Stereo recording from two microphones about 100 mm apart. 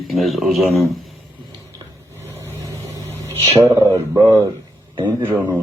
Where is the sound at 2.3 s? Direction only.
25° right (ahead or behind).